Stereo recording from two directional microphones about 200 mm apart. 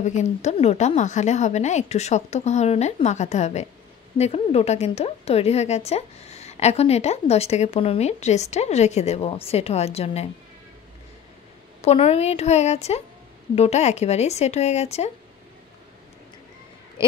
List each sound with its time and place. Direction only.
0.0 s a woman's voice: 35° left (ahead or behind)
11.8 s a woman's voice: 30° left (ahead or behind)